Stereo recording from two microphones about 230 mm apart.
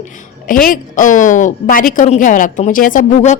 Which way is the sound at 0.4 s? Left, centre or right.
Left.